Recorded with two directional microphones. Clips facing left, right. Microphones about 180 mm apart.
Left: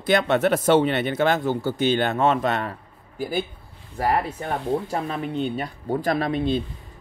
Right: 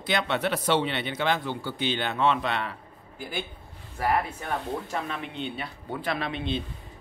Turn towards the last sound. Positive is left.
turn(degrees=40)  # may be behind; listen again after turning